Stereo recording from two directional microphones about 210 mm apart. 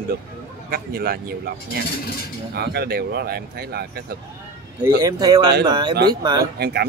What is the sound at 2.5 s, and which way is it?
Speech, 50° right (ahead or behind).